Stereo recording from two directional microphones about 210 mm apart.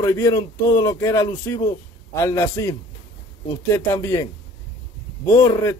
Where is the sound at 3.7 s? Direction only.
15° left (ahead or behind).